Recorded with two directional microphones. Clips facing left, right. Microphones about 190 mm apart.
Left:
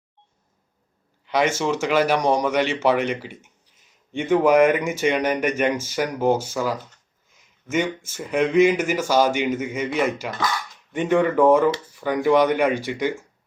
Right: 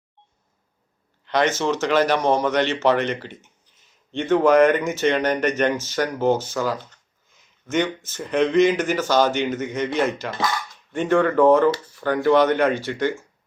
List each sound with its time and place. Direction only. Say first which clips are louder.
1.2 s speech: even; 10° left (ahead or behind)